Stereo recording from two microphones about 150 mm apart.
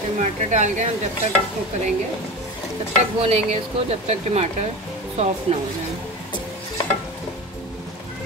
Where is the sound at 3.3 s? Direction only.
45° right (ahead or behind).